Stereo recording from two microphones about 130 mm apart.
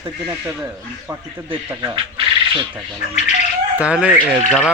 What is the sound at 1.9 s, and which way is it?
Speech, 40° right (ahead or behind).